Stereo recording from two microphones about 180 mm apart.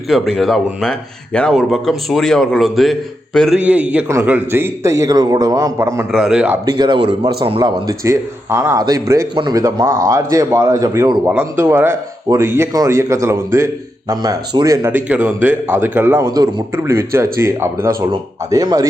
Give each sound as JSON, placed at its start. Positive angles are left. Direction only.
{"t": 0.1, "sound": "speech", "side_deg": 0}
{"t": 6.1, "sound": "speech", "side_deg": -5}
{"t": 6.7, "sound": "a man's voice", "side_deg": -25}
{"t": 7.9, "sound": "a man's voice", "side_deg": -15}
{"t": 11.3, "sound": "a man's voice", "side_deg": -10}